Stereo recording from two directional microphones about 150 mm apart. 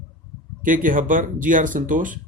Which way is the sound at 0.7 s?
65° right (ahead or behind).